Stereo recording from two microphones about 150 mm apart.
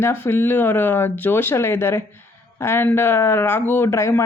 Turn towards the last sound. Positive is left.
turn(degrees=20)  # may be behind; listen again after turning